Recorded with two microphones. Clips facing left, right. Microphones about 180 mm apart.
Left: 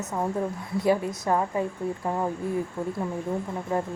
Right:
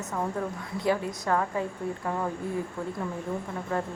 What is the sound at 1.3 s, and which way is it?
Speech, 20° left (ahead or behind).